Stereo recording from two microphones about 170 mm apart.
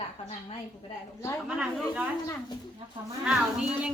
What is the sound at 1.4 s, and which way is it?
Speech, 5° right (ahead or behind).